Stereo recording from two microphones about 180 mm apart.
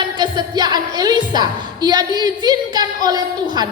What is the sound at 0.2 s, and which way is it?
A woman's voice, 25° right (ahead or behind).